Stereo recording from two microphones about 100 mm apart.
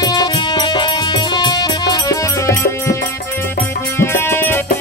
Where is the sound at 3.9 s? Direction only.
25° left (ahead or behind).